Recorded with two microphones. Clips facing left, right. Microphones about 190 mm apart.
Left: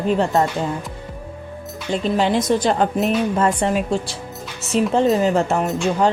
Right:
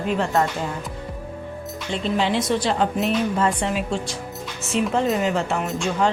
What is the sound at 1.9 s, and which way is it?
Speech, 40° left (ahead or behind).